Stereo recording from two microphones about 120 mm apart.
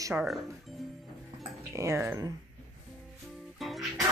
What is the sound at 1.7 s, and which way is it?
Speech, 20° right (ahead or behind).